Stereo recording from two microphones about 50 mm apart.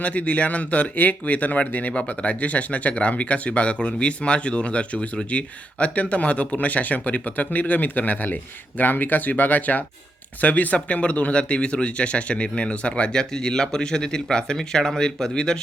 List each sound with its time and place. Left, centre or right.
0.0 s speech: left